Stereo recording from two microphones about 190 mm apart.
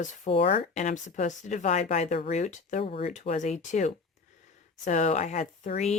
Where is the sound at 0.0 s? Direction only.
35° left (ahead or behind).